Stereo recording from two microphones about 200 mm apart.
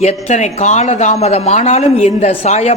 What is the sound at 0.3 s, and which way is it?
A woman's voice, 35° left (ahead or behind).